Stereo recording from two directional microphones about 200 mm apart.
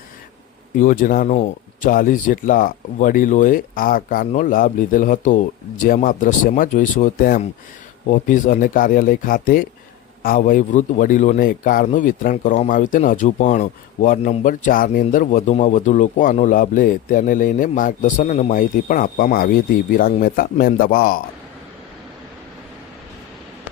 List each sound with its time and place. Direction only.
0.8 s a man's voice: 40° left (ahead or behind)